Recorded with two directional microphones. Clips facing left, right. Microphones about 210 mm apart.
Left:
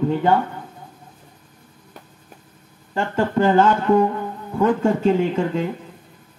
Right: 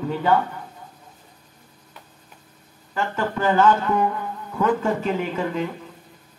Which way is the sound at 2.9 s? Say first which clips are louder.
Left 4 dB; 25° left (ahead or behind).